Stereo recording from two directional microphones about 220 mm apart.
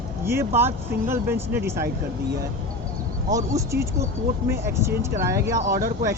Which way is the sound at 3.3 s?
15° right (ahead or behind).